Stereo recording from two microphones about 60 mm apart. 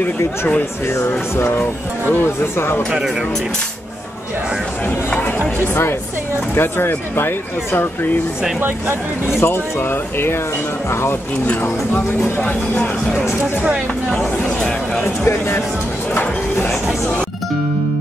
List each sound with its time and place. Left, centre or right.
1.3 s speech: left
2.9 s speech: centre
4.8 s speech: left
6.5 s speech: left
8.5 s speech: right
9.4 s speech: left
12.4 s speech: left
14.1 s speech: centre
15.2 s speech: left